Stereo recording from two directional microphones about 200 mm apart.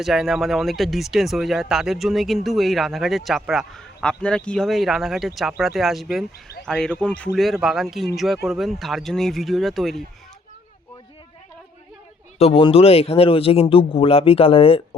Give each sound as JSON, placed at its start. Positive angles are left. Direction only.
{"t": 0.0, "sound": "speech", "side_deg": 0}
{"t": 12.4, "sound": "speech", "side_deg": 30}